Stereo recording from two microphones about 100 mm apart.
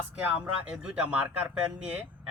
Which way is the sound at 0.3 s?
10° right (ahead or behind).